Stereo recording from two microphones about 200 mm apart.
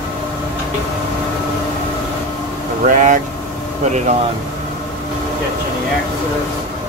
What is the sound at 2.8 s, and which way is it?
Vehicle, 40° right (ahead or behind).